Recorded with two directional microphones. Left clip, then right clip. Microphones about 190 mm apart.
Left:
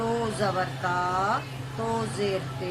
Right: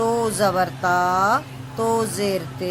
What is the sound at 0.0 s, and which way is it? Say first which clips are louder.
Speech: right 7 dB; 65° right (ahead or behind).